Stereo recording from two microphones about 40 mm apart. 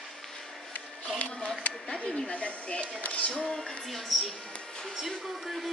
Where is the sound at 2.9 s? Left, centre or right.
Left.